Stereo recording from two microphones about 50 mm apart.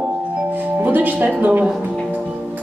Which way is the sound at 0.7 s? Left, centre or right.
Right.